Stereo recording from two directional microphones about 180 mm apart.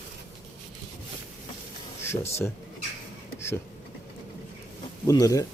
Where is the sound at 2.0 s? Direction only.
15° left (ahead or behind).